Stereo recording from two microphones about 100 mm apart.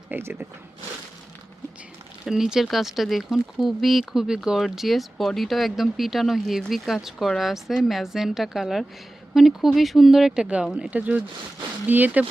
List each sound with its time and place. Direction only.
0.1 s speech: 25° right (ahead or behind)
2.2 s speech: 5° right (ahead or behind)